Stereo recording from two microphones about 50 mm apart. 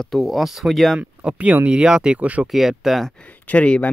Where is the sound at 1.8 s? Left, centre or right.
Centre.